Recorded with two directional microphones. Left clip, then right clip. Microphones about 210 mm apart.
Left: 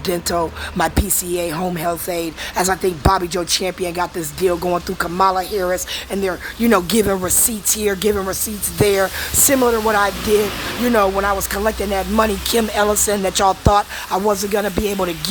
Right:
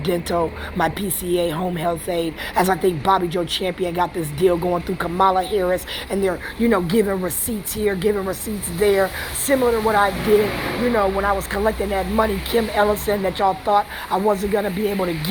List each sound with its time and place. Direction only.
0.0 s speech: 20° left (ahead or behind)
9.5 s speech: 35° left (ahead or behind)